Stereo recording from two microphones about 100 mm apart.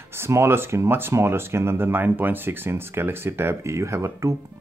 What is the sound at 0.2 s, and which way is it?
Speech, 25° right (ahead or behind).